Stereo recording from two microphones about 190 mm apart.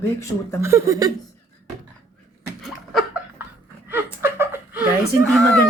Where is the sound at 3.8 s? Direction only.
10° right (ahead or behind).